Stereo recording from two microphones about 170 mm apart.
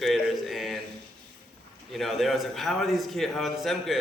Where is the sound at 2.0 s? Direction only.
Centre (ahead or behind).